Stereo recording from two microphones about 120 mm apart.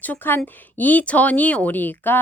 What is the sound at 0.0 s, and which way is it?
Speech, 15° left (ahead or behind).